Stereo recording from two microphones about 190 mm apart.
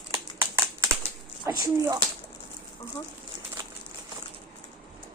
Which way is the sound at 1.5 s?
15° right (ahead or behind).